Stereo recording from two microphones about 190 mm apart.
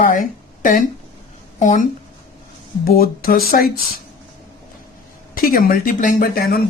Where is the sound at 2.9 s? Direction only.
50° left (ahead or behind).